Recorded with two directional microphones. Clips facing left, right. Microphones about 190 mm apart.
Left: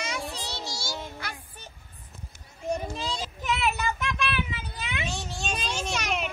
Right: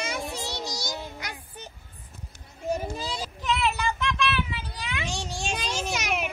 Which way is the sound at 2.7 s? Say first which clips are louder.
Right 1 dB; 5° right (ahead or behind).